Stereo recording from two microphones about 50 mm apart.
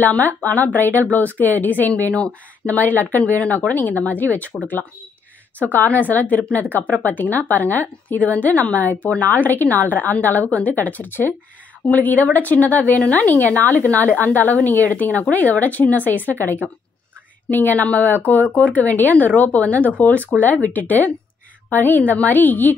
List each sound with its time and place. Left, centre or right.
0.0 s a woman's voice: left
5.6 s a woman's voice: left